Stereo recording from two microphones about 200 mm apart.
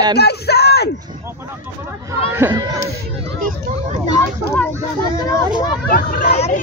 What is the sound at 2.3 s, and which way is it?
Speech, 15° right (ahead or behind).